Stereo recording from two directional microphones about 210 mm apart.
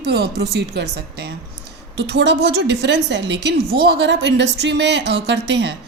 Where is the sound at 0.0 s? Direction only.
50° right (ahead or behind).